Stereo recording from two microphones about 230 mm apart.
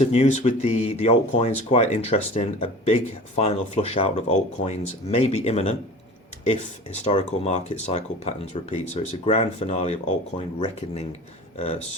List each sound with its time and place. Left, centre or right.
0.0 s speech: left